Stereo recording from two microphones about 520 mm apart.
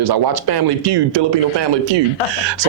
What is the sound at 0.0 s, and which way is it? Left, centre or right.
Speech, right.